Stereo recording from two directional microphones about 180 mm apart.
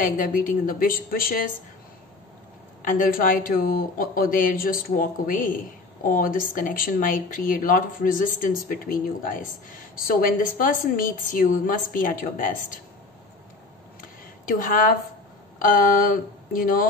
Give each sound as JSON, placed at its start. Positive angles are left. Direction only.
{"t": 0.0, "sound": "speech", "side_deg": 50}
{"t": 2.8, "sound": "speech", "side_deg": 50}
{"t": 14.4, "sound": "a woman's voice", "side_deg": 50}